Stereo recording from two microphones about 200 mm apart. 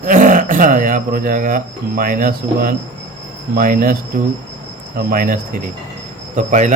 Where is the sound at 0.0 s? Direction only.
40° right (ahead or behind).